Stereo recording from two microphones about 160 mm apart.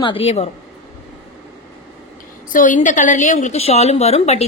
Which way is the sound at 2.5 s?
55° left (ahead or behind).